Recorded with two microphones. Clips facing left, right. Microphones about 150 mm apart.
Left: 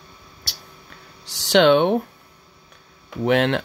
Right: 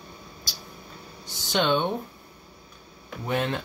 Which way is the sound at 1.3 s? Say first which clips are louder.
Left 9 dB; 80° left.